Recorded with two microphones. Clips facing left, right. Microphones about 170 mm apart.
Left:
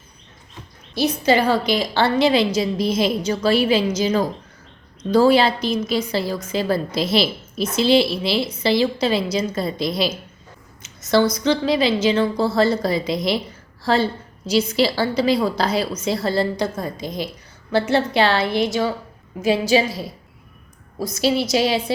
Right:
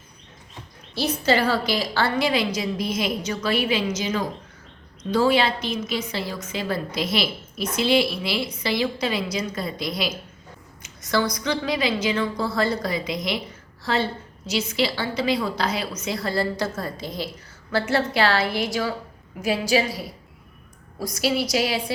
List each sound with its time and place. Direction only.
0.9 s a woman's voice: 15° left (ahead or behind)